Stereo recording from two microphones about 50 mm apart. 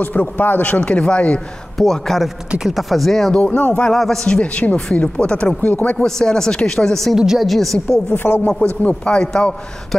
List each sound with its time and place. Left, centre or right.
0.0 s speech: left
1.8 s a woman's voice: centre
3.3 s speech: left
3.9 s speech: centre
4.3 s speech: left
5.9 s speech: centre
7.2 s a woman's voice: centre
8.1 s speech: left
8.8 s speech: left